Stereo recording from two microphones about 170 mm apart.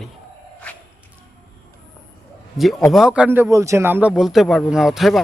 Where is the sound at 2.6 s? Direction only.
Centre (ahead or behind).